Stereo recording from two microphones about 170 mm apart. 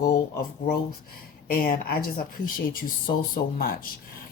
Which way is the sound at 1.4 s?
60° left (ahead or behind).